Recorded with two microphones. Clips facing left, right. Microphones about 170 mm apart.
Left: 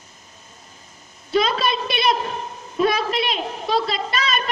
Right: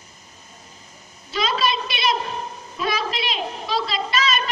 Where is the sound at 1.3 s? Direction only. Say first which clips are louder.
Left 3 dB; 50° left (ahead or behind).